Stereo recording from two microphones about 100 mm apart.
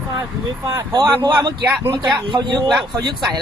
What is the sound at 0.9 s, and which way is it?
Speech, 40° right (ahead or behind).